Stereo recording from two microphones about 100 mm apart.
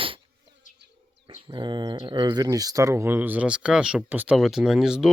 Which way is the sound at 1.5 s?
50° right (ahead or behind).